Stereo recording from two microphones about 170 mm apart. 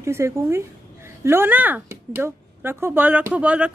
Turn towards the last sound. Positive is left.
turn(degrees=-10)  # may be behind; listen again after turning